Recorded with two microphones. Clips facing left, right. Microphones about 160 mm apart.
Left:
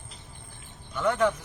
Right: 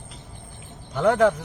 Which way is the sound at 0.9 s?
85° right.